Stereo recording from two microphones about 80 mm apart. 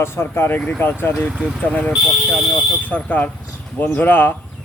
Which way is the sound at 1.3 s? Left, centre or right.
Centre.